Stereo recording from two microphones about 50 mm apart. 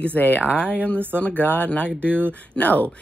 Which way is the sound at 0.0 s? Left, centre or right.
Left.